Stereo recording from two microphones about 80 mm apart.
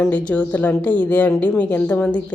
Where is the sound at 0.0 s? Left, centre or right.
Centre.